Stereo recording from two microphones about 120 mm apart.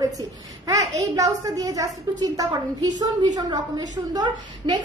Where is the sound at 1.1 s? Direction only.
30° right (ahead or behind).